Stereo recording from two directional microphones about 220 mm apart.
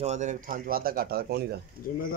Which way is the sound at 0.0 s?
30° right (ahead or behind).